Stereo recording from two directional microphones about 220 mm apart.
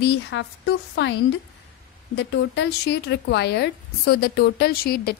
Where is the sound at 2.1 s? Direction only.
50° left (ahead or behind).